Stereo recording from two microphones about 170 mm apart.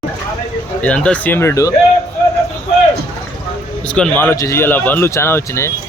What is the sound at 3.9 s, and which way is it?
A man's voice, 10° left (ahead or behind).